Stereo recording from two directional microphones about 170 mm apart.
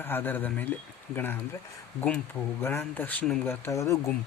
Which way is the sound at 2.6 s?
15° left (ahead or behind).